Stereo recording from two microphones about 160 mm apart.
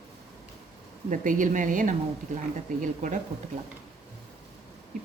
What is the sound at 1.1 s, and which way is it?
A woman's voice, 55° right (ahead or behind).